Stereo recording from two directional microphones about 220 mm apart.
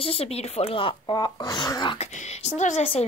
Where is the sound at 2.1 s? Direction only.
30° left (ahead or behind).